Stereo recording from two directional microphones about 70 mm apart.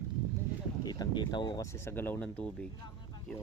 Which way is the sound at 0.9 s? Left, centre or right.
Left.